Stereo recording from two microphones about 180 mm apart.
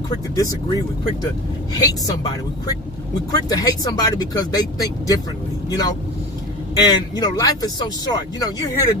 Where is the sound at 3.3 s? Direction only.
20° left (ahead or behind).